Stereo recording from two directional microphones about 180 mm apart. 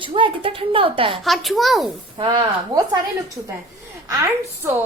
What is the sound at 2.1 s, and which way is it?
Speech, 25° right (ahead or behind).